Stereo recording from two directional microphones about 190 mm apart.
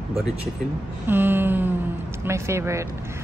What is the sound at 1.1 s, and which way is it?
A woman's voice, 10° right (ahead or behind).